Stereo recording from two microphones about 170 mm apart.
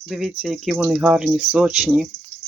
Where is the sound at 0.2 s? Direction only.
Centre (ahead or behind).